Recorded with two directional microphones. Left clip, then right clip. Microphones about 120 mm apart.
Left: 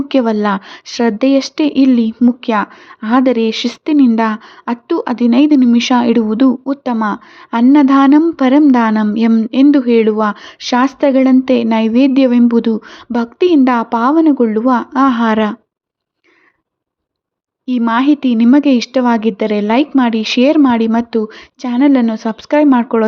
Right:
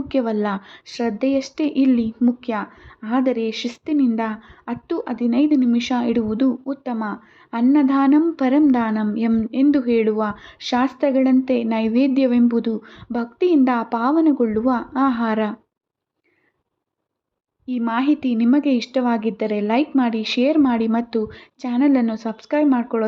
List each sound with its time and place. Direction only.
0.1 s speech: 40° left (ahead or behind)
17.7 s speech: 40° left (ahead or behind)